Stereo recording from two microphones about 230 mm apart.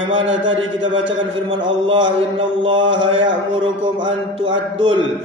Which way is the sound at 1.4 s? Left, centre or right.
Right.